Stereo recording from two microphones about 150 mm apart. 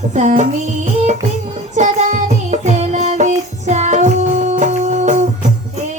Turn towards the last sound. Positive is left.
turn(degrees=-50)  # may be behind; listen again after turning